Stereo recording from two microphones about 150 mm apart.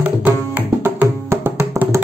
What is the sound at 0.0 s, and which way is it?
Music, 10° right (ahead or behind).